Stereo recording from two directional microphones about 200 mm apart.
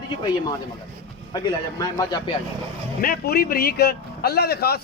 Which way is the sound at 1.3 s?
20° left (ahead or behind).